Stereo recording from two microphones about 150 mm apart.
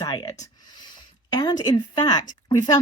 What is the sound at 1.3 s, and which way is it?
Speech, 25° left (ahead or behind).